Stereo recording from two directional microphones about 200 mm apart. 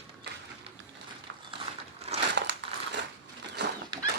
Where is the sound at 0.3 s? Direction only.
60° right (ahead or behind).